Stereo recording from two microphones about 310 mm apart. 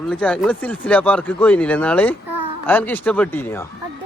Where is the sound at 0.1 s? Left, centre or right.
Centre.